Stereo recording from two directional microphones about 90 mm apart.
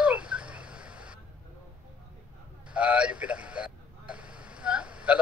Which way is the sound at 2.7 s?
15° right (ahead or behind).